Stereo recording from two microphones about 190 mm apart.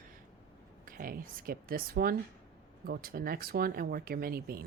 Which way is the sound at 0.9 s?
50° right (ahead or behind).